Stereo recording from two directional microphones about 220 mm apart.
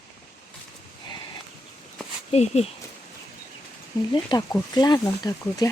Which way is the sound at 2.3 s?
30° left (ahead or behind).